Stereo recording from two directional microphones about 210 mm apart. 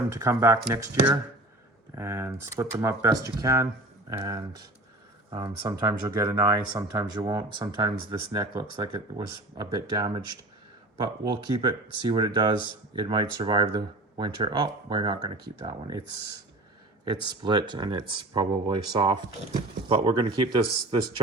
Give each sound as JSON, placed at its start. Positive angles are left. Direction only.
{"t": 0.1, "sound": "speech", "side_deg": -15}
{"t": 11.3, "sound": "speech", "side_deg": -20}
{"t": 17.1, "sound": "speech", "side_deg": -20}